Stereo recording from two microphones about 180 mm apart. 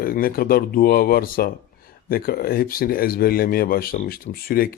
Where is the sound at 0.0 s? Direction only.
55° left (ahead or behind).